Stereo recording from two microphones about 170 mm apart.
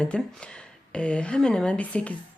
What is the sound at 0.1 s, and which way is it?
Speech, 5° left (ahead or behind).